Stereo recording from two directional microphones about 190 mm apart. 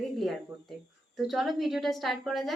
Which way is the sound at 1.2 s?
Centre (ahead or behind).